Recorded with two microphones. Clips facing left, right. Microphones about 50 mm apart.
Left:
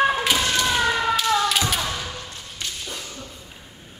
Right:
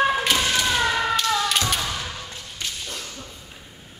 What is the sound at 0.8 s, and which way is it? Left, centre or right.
Tap, centre.